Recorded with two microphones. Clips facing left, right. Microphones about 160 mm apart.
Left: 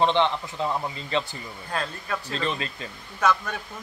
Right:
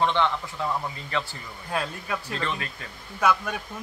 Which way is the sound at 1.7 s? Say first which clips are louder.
Right 1 dB; 10° right (ahead or behind).